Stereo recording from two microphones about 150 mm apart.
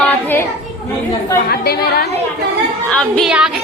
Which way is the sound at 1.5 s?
90° left.